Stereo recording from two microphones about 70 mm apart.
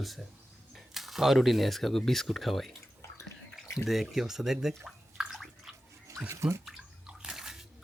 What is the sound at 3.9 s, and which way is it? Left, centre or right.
Speech, centre.